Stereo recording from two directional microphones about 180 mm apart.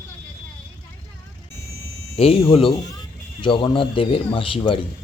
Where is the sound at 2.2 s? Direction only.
30° left (ahead or behind).